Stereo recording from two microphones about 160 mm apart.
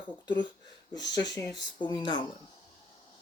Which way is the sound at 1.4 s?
25° left (ahead or behind).